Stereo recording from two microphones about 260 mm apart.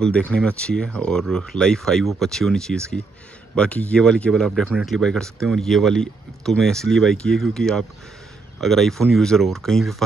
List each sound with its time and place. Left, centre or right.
0.3 s speech: centre